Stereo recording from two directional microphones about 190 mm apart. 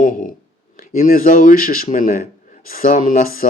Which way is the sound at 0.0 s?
45° left (ahead or behind).